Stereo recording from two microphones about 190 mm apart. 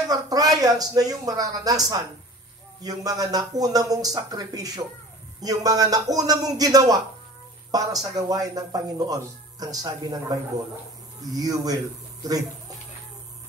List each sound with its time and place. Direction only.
0.1 s speech: 20° right (ahead or behind)